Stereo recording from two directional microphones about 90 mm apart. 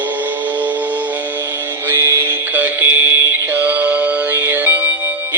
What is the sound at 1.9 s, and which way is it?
Music, 30° right (ahead or behind).